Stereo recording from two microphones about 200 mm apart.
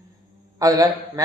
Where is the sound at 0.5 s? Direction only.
15° right (ahead or behind).